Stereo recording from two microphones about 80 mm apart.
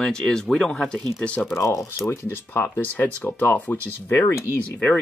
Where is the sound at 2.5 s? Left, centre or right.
Left.